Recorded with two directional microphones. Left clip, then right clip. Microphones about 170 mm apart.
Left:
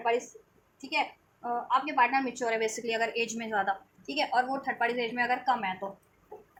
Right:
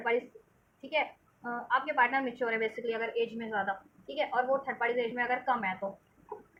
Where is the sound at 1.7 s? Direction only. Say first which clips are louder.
Left 2 dB; 25° left (ahead or behind); by 3.7 s 50° left (ahead or behind).